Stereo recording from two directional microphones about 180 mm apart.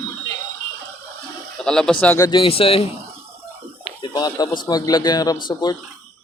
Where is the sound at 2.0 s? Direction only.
15° left (ahead or behind); by 2.8 s 35° left (ahead or behind).